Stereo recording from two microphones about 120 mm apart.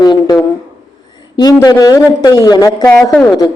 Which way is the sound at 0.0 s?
35° left (ahead or behind).